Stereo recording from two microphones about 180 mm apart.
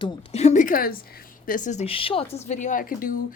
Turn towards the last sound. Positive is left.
turn(degrees=50)  # may be behind; listen again after turning